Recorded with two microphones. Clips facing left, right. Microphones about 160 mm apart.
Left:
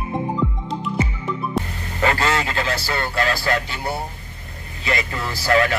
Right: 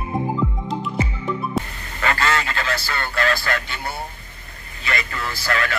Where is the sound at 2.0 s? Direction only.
15° left (ahead or behind).